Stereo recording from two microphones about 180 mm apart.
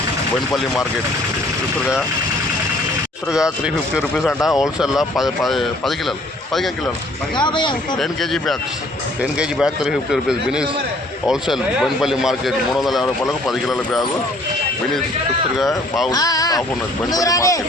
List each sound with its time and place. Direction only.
3.2 s speech: 5° right (ahead or behind)
7.3 s speech: 25° left (ahead or behind)
7.9 s speech: centre (ahead or behind)
15.5 s speech: centre (ahead or behind)
16.0 s speech: 20° left (ahead or behind)